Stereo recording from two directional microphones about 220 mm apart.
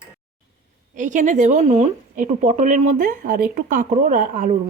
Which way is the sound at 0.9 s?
35° right (ahead or behind).